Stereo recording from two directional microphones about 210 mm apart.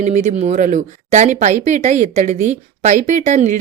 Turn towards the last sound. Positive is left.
turn(degrees=-35)  # may be behind; listen again after turning